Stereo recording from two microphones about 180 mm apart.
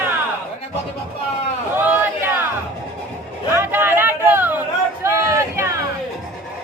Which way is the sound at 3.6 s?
10° right (ahead or behind).